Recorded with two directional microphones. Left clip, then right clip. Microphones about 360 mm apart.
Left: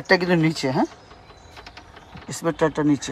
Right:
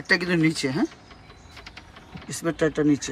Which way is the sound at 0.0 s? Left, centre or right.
Centre.